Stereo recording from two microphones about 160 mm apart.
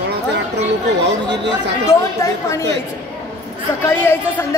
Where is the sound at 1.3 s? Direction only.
90° right.